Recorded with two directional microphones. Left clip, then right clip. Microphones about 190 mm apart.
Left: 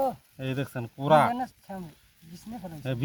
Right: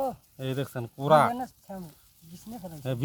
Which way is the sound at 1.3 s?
15° left (ahead or behind).